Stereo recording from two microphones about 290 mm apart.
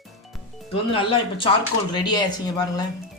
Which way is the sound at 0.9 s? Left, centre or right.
Centre.